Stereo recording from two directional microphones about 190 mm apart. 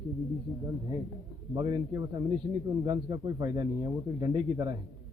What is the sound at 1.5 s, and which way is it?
Speech, 20° right (ahead or behind).